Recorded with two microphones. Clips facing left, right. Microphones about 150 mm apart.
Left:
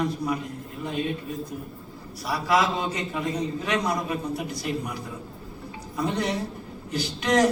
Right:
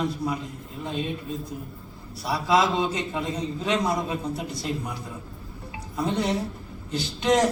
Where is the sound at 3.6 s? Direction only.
25° right (ahead or behind).